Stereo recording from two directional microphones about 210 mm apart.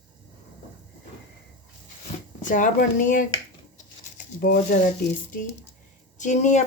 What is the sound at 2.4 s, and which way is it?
Speech, 40° left (ahead or behind).